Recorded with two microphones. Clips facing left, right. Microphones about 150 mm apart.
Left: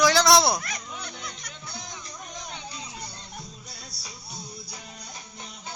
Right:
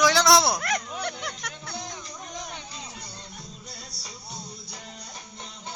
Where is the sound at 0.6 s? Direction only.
75° right (ahead or behind).